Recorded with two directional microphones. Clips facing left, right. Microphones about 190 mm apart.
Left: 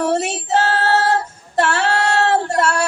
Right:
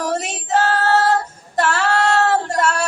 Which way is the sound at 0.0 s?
25° left (ahead or behind).